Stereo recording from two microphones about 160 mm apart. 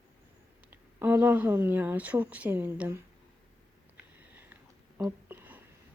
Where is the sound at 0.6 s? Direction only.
10° right (ahead or behind).